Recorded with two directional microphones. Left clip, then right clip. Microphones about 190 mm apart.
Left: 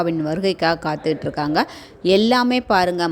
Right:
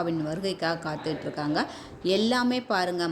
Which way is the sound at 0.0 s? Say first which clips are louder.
Left 9 dB; 40° left (ahead or behind).